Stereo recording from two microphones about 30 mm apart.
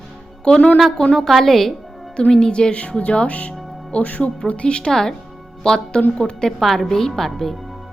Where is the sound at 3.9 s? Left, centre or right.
Left.